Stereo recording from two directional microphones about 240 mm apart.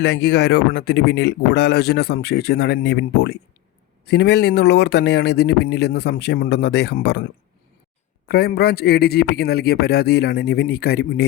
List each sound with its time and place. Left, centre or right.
0.0 s speech: left
8.3 s a man's voice: left